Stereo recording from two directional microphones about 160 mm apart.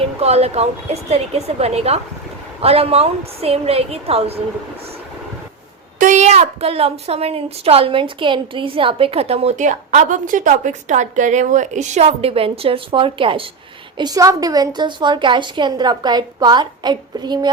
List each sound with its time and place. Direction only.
0.2 s a woman's voice: 40° right (ahead or behind)
6.0 s a woman's voice: 50° right (ahead or behind); by 13.4 s 35° right (ahead or behind)
14.0 s a woman's voice: 20° right (ahead or behind)